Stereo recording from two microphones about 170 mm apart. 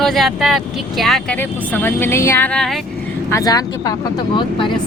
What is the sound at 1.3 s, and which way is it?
Speech, 10° left (ahead or behind).